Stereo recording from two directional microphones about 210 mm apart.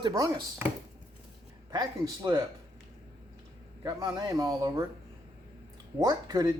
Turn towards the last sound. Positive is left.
turn(degrees=-20)  # may be behind; listen again after turning